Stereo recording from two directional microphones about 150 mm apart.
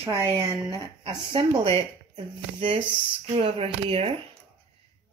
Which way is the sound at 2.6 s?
35° right (ahead or behind).